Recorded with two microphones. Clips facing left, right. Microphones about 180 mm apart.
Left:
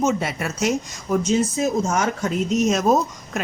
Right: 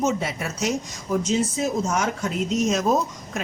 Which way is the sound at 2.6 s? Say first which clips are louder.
Left 3 dB; 55° left (ahead or behind).